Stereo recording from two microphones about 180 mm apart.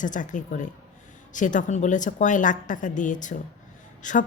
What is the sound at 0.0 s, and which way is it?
Speech, 45° left (ahead or behind).